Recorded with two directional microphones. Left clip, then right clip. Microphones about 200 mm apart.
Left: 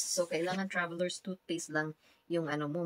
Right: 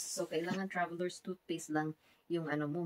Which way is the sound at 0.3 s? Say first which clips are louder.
Left 4 dB; 55° left (ahead or behind).